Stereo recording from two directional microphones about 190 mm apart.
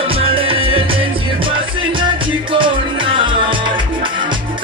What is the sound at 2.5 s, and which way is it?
Music, 25° right (ahead or behind).